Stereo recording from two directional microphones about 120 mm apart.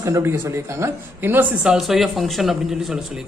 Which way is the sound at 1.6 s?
5° right (ahead or behind).